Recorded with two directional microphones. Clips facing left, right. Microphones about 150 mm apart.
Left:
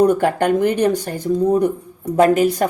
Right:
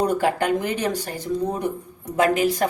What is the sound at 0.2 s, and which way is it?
Speech, 50° left (ahead or behind).